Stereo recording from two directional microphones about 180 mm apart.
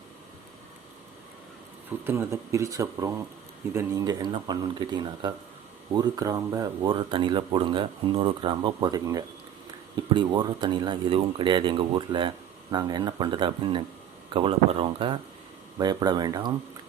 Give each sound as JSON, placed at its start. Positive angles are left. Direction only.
{"t": 2.0, "sound": "speech", "side_deg": -15}